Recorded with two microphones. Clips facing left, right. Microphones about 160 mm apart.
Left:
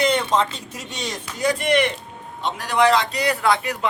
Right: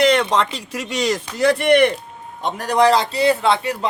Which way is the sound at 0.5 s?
90° right.